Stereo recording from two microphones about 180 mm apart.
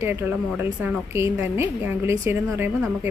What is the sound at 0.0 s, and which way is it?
A woman's voice, 15° right (ahead or behind).